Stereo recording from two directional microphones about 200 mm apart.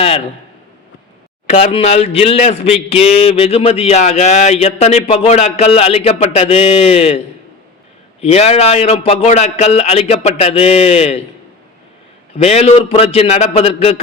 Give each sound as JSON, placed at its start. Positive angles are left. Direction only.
{"t": 1.5, "sound": "speech", "side_deg": 35}
{"t": 8.2, "sound": "speech", "side_deg": 30}
{"t": 12.4, "sound": "speech", "side_deg": 30}